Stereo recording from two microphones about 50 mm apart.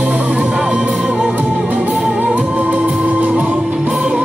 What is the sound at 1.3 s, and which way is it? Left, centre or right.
Music, right.